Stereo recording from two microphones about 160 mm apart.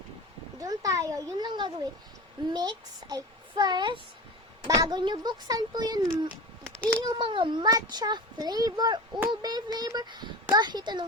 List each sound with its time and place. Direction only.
0.6 s a child's voice: 20° right (ahead or behind)
6.7 s a sound: 5° left (ahead or behind)
7.0 s a child's voice: 30° right (ahead or behind)